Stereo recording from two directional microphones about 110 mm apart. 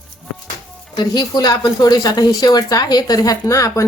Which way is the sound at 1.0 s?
40° left (ahead or behind).